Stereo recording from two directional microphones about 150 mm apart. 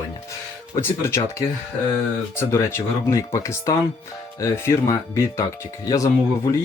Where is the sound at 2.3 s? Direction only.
15° left (ahead or behind).